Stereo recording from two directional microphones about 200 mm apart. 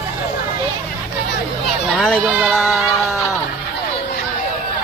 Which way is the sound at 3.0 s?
Centre (ahead or behind).